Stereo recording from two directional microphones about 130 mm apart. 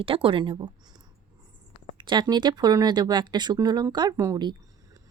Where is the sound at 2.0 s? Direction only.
35° right (ahead or behind).